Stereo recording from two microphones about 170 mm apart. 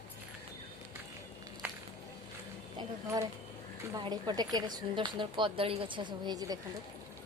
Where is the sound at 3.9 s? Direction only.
25° right (ahead or behind).